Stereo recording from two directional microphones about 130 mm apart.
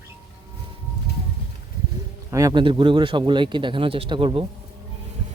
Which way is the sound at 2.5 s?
40° right (ahead or behind).